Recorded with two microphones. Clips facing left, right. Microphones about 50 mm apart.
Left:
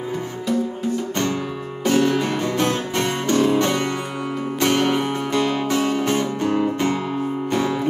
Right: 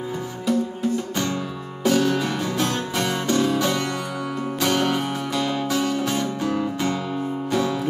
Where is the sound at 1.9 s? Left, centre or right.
Centre.